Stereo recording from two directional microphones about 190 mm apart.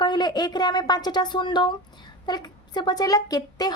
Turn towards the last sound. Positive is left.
turn(degrees=20)  # may be behind; listen again after turning